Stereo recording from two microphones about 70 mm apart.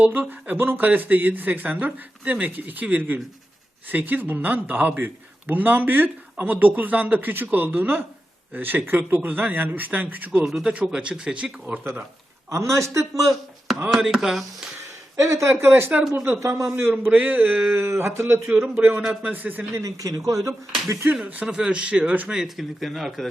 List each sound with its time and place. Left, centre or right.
0.0 s speech: right
10.4 s speech: centre
12.5 s speech: right
13.9 s speech: centre
15.1 s speech: right
16.4 s speech: right
16.7 s speech: right
17.7 s speech: right
19.7 s speech: right
21.1 s speech: right
22.3 s speech: centre